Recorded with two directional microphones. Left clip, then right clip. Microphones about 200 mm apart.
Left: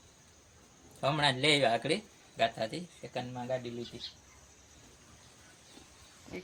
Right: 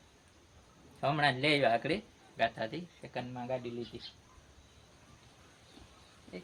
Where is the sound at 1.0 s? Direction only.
25° left (ahead or behind).